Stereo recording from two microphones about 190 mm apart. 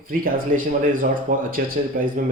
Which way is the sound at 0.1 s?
50° right (ahead or behind).